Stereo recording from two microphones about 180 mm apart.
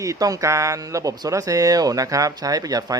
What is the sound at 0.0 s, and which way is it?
Speech, 20° right (ahead or behind).